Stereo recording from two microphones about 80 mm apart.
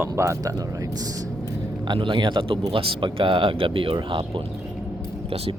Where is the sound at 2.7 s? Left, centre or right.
Right.